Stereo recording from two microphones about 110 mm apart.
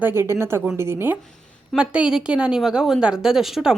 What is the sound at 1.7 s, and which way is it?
A woman's voice, 10° right (ahead or behind).